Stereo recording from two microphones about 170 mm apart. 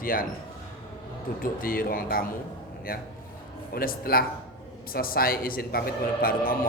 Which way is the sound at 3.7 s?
60° left (ahead or behind).